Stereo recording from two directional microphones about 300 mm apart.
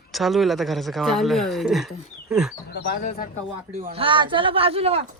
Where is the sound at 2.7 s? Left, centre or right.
Left.